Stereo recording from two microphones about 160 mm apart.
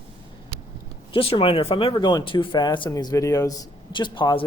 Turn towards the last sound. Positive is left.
turn(degrees=30)  # may be behind; listen again after turning